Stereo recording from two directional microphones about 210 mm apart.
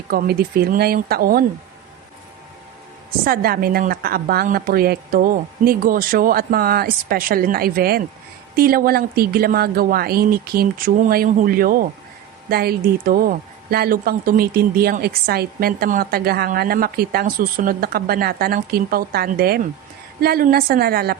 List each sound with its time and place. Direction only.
0.1 s speech: 45° right (ahead or behind)
3.2 s speech: 45° right (ahead or behind)